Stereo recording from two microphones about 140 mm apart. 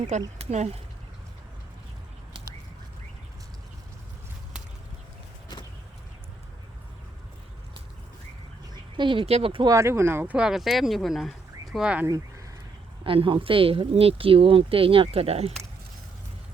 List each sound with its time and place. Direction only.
0.1 s speech: 55° right (ahead or behind)
8.7 s speech: 35° right (ahead or behind)
9.6 s speech: 20° right (ahead or behind)
13.1 s speech: 40° right (ahead or behind)